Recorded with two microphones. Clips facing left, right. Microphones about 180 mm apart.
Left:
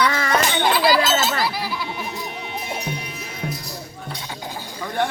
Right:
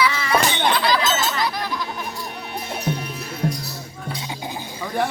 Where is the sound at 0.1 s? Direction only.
50° left (ahead or behind).